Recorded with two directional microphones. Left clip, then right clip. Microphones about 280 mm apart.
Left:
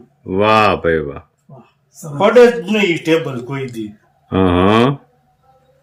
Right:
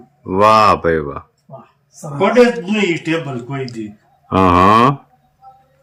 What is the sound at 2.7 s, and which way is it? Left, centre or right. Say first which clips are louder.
Speech: left 3 dB; centre.